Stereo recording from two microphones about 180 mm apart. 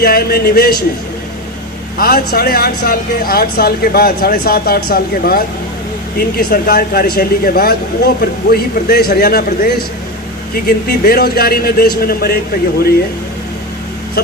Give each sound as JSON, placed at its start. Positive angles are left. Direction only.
{"t": 0.0, "sound": "speech", "side_deg": 55}
{"t": 2.0, "sound": "speech", "side_deg": 55}